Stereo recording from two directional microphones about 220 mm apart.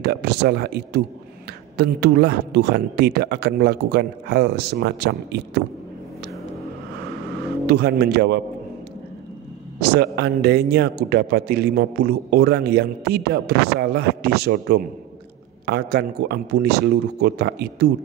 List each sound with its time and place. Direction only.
0.0 s a man's voice: 45° right (ahead or behind)
7.6 s a man's voice: 45° right (ahead or behind)
9.8 s a man's voice: 45° right (ahead or behind)